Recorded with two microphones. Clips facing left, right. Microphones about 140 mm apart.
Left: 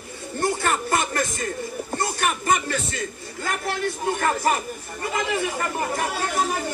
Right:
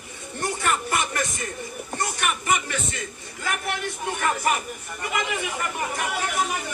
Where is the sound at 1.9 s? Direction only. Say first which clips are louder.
Left 2 dB; 30° left (ahead or behind).